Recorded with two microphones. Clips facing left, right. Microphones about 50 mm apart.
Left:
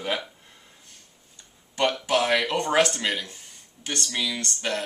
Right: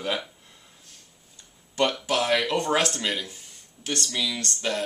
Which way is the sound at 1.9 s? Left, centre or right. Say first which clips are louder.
Left 1 dB; centre.